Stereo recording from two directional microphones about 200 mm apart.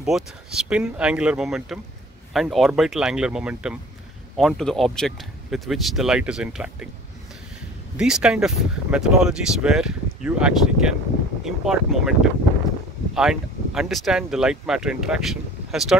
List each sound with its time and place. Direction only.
0.0 s speech: centre (ahead or behind)
8.0 s speech: 5° right (ahead or behind)